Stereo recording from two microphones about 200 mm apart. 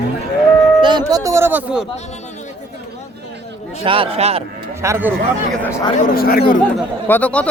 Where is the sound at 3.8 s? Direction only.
25° right (ahead or behind).